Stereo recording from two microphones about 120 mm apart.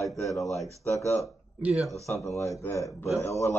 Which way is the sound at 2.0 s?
25° left (ahead or behind).